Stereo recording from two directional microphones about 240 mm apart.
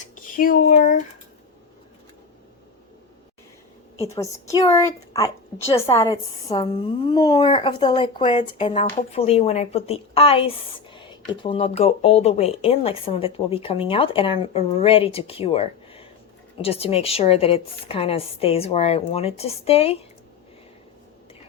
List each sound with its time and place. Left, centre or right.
0.2 s speech: left
4.1 s a woman's voice: centre